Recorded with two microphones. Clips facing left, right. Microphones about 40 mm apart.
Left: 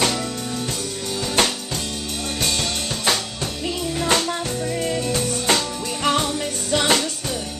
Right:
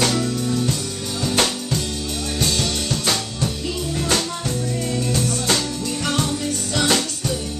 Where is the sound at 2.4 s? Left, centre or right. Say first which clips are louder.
Right 2 dB; centre.